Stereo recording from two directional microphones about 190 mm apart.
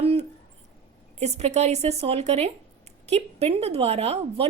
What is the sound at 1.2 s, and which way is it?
A woman's voice, 35° right (ahead or behind).